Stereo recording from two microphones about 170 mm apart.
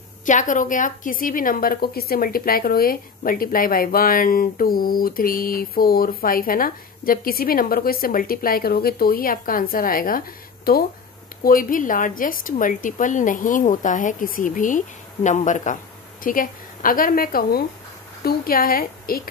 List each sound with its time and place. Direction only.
0.2 s a woman's voice: 50° left (ahead or behind)